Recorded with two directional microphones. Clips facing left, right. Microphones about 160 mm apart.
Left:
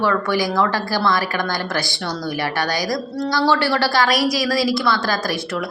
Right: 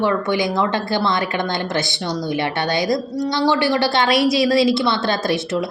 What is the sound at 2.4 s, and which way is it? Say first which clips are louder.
A woman's voice: even; 25° right (ahead or behind).